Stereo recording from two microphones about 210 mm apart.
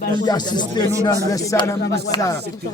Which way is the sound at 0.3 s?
20° left (ahead or behind).